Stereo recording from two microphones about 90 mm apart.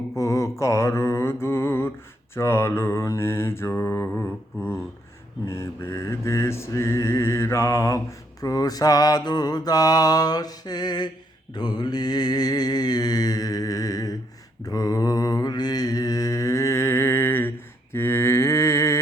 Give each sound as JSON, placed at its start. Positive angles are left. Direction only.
{"t": 0.2, "sound": "mantra", "side_deg": 40}
{"t": 4.2, "sound": "a sound", "side_deg": 30}
{"t": 5.5, "sound": "mantra", "side_deg": 30}